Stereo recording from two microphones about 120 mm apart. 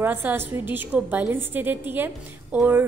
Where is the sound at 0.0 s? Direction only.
15° right (ahead or behind).